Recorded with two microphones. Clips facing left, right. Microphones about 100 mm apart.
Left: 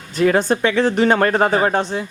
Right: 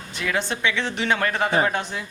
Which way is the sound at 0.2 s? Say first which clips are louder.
Left 10 dB; 45° left (ahead or behind).